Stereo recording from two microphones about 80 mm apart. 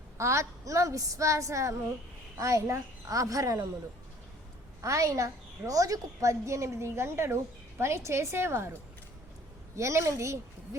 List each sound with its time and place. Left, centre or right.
0.2 s a woman's voice: right
4.8 s a woman's voice: right